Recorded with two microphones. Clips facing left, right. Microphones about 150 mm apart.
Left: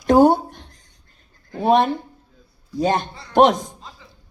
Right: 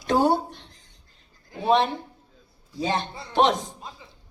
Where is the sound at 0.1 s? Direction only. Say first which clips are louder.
Left 7 dB; 50° left (ahead or behind).